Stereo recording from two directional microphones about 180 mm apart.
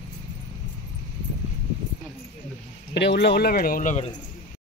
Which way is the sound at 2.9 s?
70° left (ahead or behind).